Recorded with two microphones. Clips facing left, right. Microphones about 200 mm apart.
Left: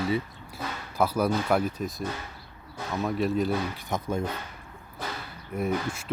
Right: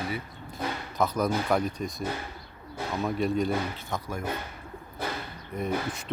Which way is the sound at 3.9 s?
25° left (ahead or behind).